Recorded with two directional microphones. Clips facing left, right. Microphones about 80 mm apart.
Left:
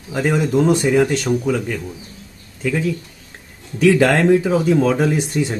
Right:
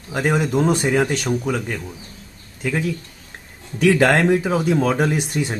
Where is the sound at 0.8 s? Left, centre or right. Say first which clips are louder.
Left 3 dB; centre.